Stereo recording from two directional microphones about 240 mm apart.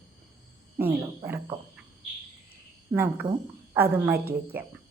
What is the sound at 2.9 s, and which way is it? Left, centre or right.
A woman's voice, centre.